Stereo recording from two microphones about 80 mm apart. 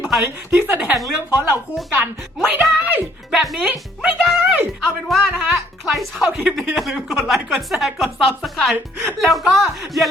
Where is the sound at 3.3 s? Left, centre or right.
Centre.